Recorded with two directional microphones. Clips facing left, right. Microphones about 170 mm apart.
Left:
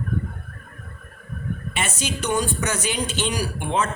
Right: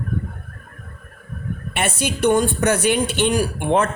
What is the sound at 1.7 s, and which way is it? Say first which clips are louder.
Speech: right 6 dB; 55° right (ahead or behind).